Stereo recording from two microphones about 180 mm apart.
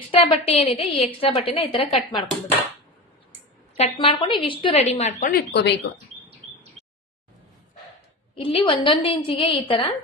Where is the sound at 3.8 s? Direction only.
30° left (ahead or behind).